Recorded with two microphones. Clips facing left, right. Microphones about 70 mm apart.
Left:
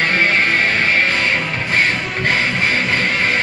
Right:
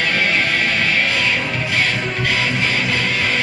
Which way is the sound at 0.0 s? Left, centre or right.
Left.